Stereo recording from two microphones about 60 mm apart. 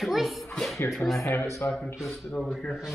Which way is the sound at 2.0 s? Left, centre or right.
Centre.